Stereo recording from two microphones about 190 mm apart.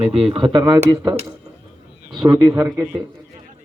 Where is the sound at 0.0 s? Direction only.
30° right (ahead or behind).